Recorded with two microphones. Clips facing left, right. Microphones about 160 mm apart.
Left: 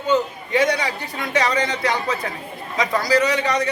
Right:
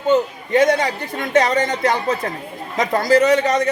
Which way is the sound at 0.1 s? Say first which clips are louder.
Right 4 dB; 45° right (ahead or behind).